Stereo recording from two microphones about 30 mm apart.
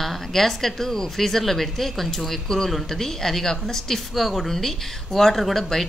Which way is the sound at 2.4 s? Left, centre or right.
Centre.